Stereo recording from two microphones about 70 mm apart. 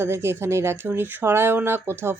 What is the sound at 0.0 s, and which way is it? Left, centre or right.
A man's voice, right.